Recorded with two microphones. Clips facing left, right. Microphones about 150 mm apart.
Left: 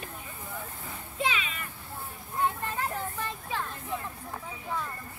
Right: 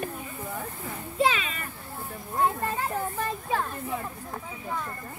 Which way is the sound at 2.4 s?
45° right (ahead or behind).